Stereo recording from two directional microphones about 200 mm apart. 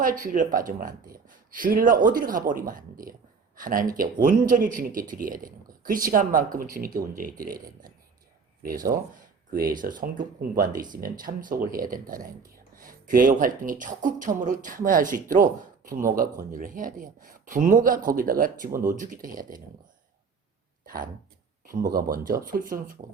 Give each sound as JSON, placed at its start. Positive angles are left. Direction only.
{"t": 0.0, "sound": "speech", "side_deg": -40}
{"t": 9.5, "sound": "speech", "side_deg": -45}
{"t": 20.8, "sound": "a sound", "side_deg": -45}
{"t": 21.9, "sound": "speech", "side_deg": -45}